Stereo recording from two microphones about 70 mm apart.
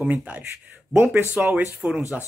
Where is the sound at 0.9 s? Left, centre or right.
Right; by 2.1 s centre.